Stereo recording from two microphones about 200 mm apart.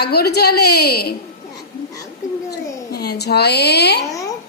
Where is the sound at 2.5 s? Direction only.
55° left (ahead or behind).